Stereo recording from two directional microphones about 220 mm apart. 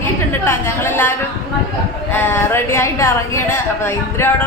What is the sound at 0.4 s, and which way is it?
Speech, 10° left (ahead or behind).